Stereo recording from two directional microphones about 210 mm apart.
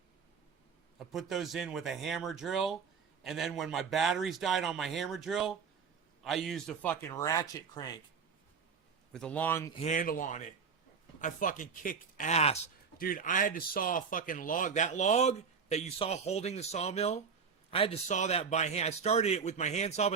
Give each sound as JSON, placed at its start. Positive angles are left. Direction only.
{"t": 0.9, "sound": "a man's voice", "side_deg": 0}
{"t": 9.1, "sound": "speech", "side_deg": 5}
{"t": 9.7, "sound": "speech", "side_deg": 35}